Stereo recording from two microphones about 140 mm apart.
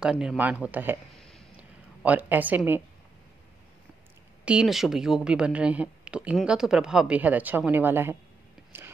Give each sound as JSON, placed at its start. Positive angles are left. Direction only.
{"t": 0.0, "sound": "a woman's voice", "side_deg": -5}
{"t": 4.5, "sound": "speech", "side_deg": -5}
{"t": 8.7, "sound": "a sound", "side_deg": -15}